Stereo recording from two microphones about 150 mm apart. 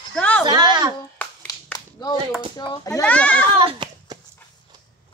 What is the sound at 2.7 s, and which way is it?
Speech, 20° left (ahead or behind).